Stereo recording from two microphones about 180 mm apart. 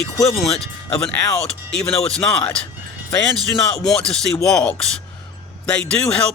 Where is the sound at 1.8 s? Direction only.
5° left (ahead or behind).